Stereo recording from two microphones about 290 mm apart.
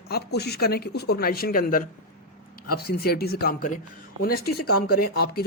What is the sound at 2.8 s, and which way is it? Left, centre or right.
A man's voice, left.